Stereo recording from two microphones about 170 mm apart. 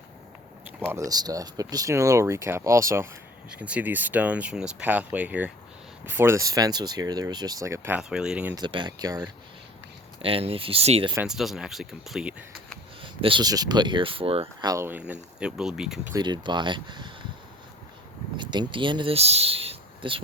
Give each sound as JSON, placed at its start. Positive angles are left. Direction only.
{"t": 0.9, "sound": "speech", "side_deg": -20}
{"t": 8.5, "sound": "speech", "side_deg": -25}
{"t": 10.2, "sound": "speech", "side_deg": -35}
{"t": 11.1, "sound": "speech", "side_deg": -5}
{"t": 13.0, "sound": "speech", "side_deg": -30}
{"t": 14.7, "sound": "speech", "side_deg": -15}
{"t": 16.1, "sound": "speech", "side_deg": -25}
{"t": 18.3, "sound": "speech", "side_deg": -25}